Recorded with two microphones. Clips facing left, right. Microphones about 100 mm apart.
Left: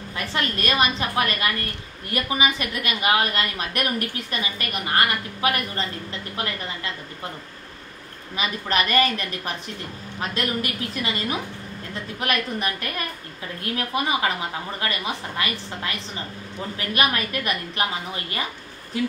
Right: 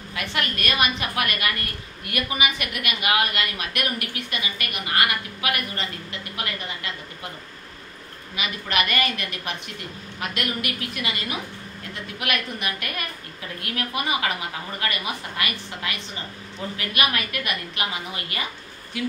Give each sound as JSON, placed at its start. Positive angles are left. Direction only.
{"t": 0.2, "sound": "a woman's voice", "side_deg": 30}
{"t": 8.4, "sound": "a woman's voice", "side_deg": 35}
{"t": 16.9, "sound": "a woman's voice", "side_deg": 35}